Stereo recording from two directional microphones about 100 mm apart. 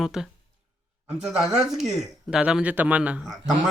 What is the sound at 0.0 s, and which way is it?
Speech, 5° right (ahead or behind).